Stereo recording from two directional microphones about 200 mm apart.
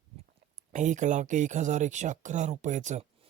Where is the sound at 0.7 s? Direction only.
40° right (ahead or behind).